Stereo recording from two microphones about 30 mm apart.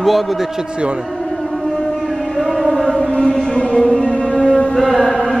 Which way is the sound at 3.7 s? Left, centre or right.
Centre.